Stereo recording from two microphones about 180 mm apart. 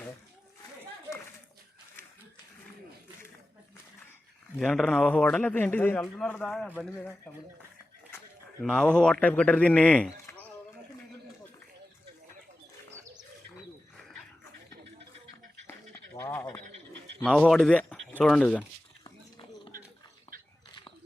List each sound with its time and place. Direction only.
4.5 s a man's voice: centre (ahead or behind)
8.7 s a man's voice: 5° left (ahead or behind)
16.1 s a sound: 15° left (ahead or behind)
17.2 s speech: 5° left (ahead or behind)
19.0 s a sound: 30° left (ahead or behind)
20.3 s biting: 50° right (ahead or behind)